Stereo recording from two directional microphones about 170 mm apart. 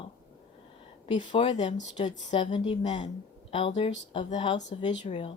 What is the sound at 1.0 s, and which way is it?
Speech, 30° left (ahead or behind).